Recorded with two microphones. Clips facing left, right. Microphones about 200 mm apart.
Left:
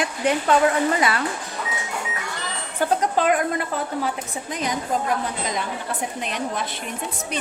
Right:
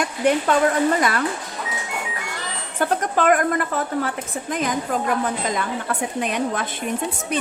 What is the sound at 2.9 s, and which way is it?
A woman's voice, 50° right (ahead or behind).